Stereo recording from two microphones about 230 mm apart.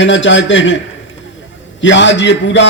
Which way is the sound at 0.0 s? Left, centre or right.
Left.